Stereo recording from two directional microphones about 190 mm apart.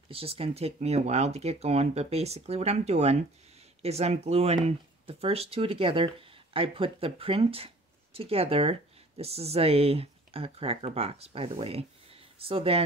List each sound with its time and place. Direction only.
0.1 s speech: 30° right (ahead or behind)